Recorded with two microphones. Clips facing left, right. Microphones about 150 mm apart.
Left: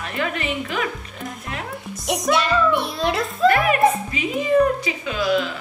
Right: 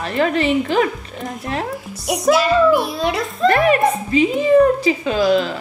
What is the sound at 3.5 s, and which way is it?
Music, 30° right (ahead or behind).